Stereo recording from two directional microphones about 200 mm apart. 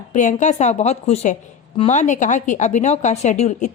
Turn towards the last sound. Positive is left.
turn(degrees=35)  # may be behind; listen again after turning